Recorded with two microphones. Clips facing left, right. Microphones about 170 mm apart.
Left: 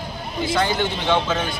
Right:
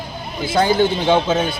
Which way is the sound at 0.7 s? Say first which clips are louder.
Right 6 dB; 35° right (ahead or behind).